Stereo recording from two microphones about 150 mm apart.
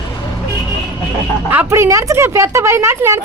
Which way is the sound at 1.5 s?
15° right (ahead or behind).